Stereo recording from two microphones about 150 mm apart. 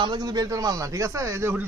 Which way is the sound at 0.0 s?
30° right (ahead or behind).